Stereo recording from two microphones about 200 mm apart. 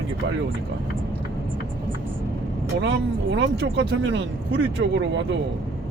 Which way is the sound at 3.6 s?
60° right (ahead or behind).